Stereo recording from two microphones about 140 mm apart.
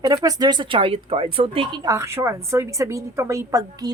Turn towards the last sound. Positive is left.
turn(degrees=-25)  # may be behind; listen again after turning